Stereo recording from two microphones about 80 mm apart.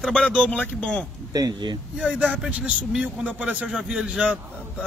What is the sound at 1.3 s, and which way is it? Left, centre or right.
Speech, right.